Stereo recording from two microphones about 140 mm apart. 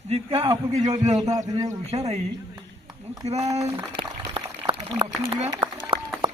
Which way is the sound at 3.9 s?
40° right (ahead or behind).